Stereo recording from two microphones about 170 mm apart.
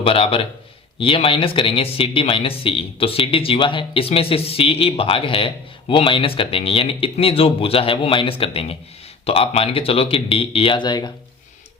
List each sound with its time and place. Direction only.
0.0 s speech: 35° left (ahead or behind)